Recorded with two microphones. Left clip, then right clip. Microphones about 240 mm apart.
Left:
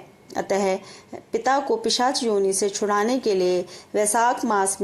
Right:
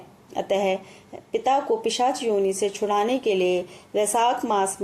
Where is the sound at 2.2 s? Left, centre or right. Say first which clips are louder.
Left 1 dB; left.